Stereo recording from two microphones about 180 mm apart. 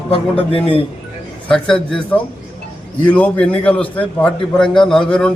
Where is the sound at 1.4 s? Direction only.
5° left (ahead or behind).